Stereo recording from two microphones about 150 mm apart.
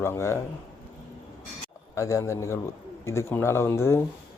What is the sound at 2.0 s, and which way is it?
A man's voice, 20° left (ahead or behind).